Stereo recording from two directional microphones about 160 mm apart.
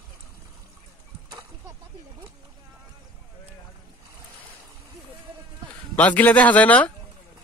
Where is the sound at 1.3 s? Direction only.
20° right (ahead or behind).